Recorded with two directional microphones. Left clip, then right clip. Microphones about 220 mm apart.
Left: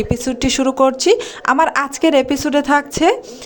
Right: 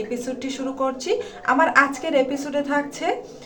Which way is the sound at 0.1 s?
50° left (ahead or behind).